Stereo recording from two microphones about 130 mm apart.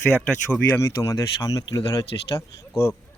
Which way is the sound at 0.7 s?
25° left (ahead or behind).